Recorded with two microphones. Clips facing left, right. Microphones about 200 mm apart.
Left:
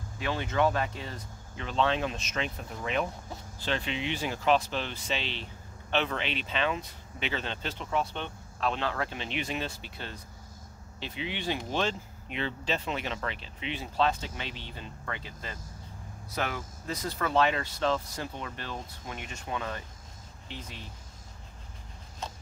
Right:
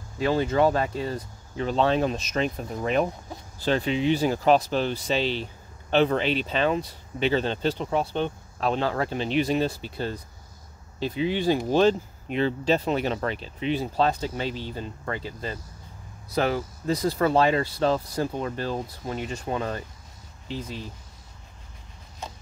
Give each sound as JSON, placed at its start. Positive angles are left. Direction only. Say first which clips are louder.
{"t": 0.2, "sound": "speech", "louder": "right 7 dB", "side_deg": -40}